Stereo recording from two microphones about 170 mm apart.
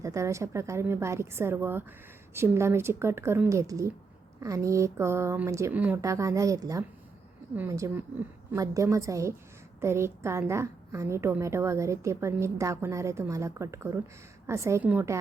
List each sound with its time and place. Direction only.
0.0 s a woman's voice: 20° right (ahead or behind)